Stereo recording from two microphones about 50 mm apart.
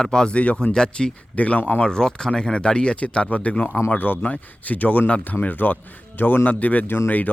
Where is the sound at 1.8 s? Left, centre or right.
Centre.